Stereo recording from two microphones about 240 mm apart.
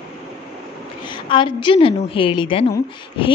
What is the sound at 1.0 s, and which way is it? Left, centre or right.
A woman's voice, centre.